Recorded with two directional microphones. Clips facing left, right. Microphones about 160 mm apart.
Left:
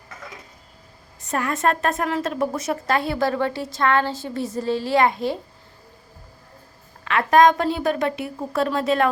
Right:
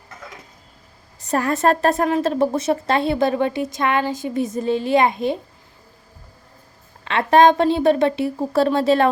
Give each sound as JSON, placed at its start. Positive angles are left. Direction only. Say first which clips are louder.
{"t": 1.3, "sound": "a woman's voice", "louder": "right 4 dB", "side_deg": -35}
{"t": 7.0, "sound": "a woman's voice", "louder": "right 2 dB", "side_deg": -25}